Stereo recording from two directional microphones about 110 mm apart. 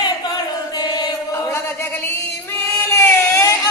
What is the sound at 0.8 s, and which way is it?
Chant, 35° left (ahead or behind).